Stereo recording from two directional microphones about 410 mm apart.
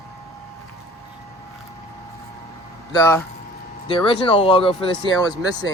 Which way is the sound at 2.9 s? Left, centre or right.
Centre.